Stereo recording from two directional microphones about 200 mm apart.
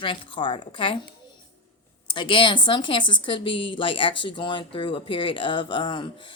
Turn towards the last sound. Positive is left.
turn(degrees=25)  # may be behind; listen again after turning